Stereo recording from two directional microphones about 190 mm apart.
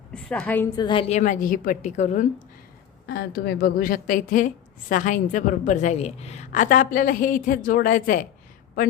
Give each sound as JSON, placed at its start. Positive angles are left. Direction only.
{"t": 0.1, "sound": "a woman's voice", "side_deg": 5}
{"t": 0.8, "sound": "a woman's voice", "side_deg": 25}
{"t": 3.1, "sound": "a woman's voice", "side_deg": 55}